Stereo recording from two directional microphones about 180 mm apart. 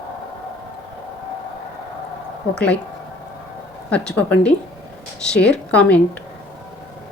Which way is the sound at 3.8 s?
5° left (ahead or behind).